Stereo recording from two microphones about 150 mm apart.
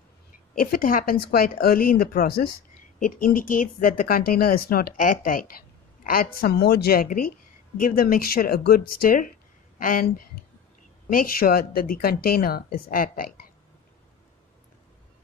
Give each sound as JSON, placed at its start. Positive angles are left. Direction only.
{"t": 0.6, "sound": "speech", "side_deg": 70}
{"t": 3.0, "sound": "speech", "side_deg": 65}
{"t": 12.9, "sound": "speech", "side_deg": 70}